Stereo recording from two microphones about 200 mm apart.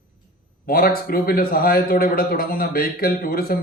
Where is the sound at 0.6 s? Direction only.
45° left (ahead or behind).